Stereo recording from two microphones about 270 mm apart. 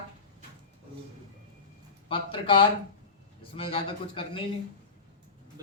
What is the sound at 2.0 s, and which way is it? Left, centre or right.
Speech, centre.